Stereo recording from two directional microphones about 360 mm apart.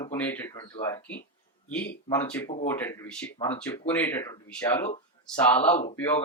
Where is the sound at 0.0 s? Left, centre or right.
Centre.